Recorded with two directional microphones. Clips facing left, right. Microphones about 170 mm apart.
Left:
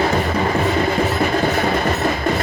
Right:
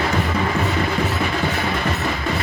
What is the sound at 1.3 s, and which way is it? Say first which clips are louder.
Train: left 5 dB; 40° left (ahead or behind).